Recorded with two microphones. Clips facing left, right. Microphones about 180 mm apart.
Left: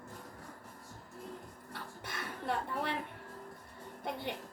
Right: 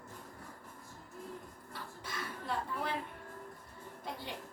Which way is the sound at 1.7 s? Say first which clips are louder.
Even; 65° left (ahead or behind).